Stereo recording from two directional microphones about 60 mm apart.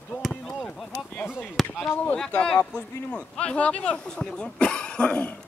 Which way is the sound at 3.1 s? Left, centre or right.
Left.